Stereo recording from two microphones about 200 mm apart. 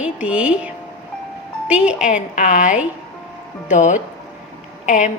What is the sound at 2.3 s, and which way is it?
Speech, 40° left (ahead or behind).